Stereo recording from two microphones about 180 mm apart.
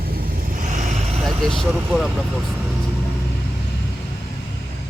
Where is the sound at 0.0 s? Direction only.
55° right (ahead or behind).